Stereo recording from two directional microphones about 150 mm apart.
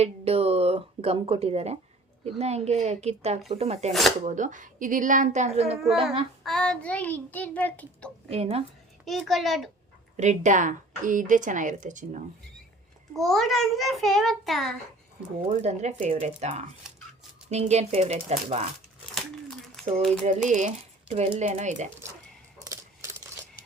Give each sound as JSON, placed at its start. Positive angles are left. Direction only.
{"t": 0.0, "sound": "speech", "side_deg": -40}
{"t": 5.8, "sound": "a child's voice", "side_deg": 0}
{"t": 8.3, "sound": "a woman's voice", "side_deg": -40}
{"t": 9.0, "sound": "a child's voice", "side_deg": 0}
{"t": 10.2, "sound": "speech", "side_deg": -50}
{"t": 13.1, "sound": "a child's voice", "side_deg": 0}
{"t": 15.4, "sound": "speech", "side_deg": -45}
{"t": 19.1, "sound": "crumpling", "side_deg": 0}
{"t": 20.0, "sound": "a child's voice", "side_deg": 5}
{"t": 20.2, "sound": "speech", "side_deg": -50}
{"t": 22.6, "sound": "a sound", "side_deg": -20}